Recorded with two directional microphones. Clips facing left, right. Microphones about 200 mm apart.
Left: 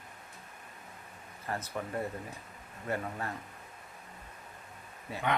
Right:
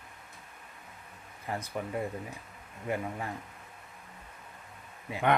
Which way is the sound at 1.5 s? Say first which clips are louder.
Right 2 dB; 15° right (ahead or behind).